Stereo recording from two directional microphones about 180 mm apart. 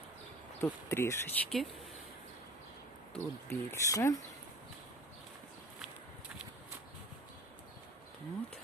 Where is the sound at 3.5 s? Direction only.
15° left (ahead or behind).